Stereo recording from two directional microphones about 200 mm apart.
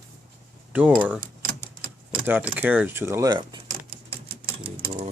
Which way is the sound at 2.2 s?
10° right (ahead or behind).